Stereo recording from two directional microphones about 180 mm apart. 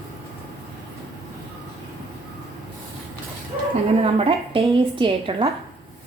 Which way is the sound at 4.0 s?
30° right (ahead or behind).